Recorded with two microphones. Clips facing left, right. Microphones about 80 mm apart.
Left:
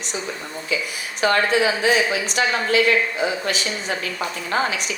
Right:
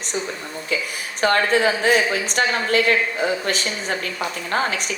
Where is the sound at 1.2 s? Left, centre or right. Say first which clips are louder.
Even; right.